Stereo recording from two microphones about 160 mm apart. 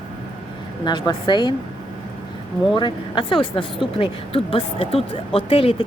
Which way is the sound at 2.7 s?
30° left (ahead or behind).